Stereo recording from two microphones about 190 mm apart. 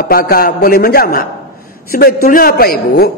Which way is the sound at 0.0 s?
50° left (ahead or behind).